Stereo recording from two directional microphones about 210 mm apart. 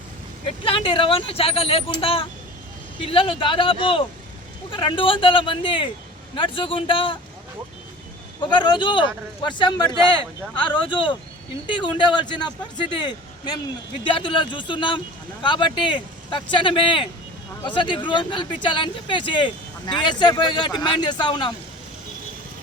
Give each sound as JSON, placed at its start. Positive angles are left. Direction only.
{"t": 0.6, "sound": "speech", "side_deg": 25}
{"t": 8.4, "sound": "speech", "side_deg": 20}